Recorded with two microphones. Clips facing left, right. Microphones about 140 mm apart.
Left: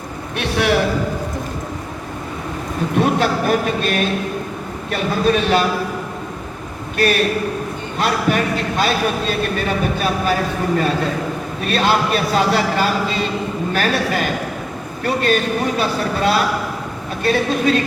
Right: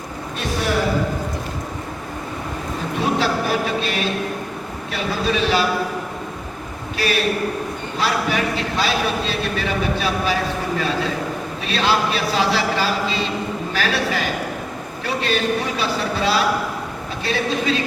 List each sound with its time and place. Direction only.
0.3 s a sound: 70° left (ahead or behind)
3.0 s a man's voice: 50° left (ahead or behind)
6.9 s a man's voice: 50° left (ahead or behind)
11.6 s a man's voice: 50° left (ahead or behind)